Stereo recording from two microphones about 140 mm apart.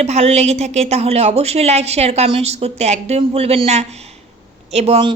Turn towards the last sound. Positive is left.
turn(degrees=-50)  # may be behind; listen again after turning